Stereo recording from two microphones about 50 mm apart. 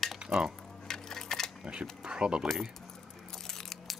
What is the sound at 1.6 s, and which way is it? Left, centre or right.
Speech, centre.